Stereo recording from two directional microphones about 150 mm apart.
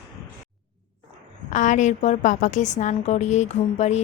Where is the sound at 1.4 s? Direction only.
55° left (ahead or behind).